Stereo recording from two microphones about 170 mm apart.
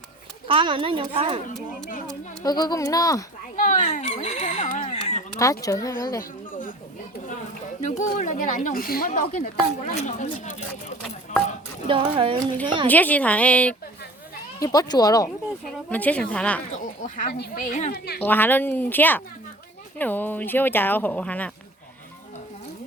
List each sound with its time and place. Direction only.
0.4 s a woman's voice: 30° right (ahead or behind)
2.4 s speech: 25° left (ahead or behind)
3.5 s a sound: 50° left (ahead or behind)
5.4 s speech: 20° left (ahead or behind)
7.8 s speech: 45° left (ahead or behind)
9.8 s speech: 40° left (ahead or behind)
11.9 s a woman's voice: 30° right (ahead or behind)
12.9 s speech: 10° left (ahead or behind)
14.6 s speech: 20° left (ahead or behind)
15.9 s speech: 10° left (ahead or behind)
16.8 s speech: 50° left (ahead or behind)
17.3 s speech: 65° left (ahead or behind)
17.9 s a woman's voice: 70° left (ahead or behind)
18.2 s speech: 10° left (ahead or behind)